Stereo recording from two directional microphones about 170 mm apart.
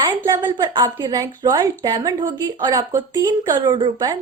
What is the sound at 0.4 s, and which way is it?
A woman's voice, 25° right (ahead or behind).